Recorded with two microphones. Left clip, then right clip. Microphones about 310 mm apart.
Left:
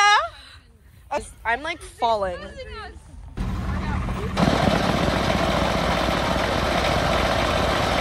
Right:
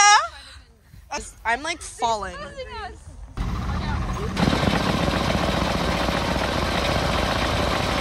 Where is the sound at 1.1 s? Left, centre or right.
Centre.